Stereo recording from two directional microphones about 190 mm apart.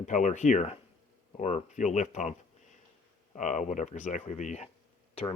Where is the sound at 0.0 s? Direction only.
40° left (ahead or behind).